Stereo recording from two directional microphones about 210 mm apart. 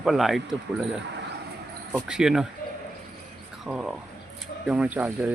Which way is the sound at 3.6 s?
5° right (ahead or behind).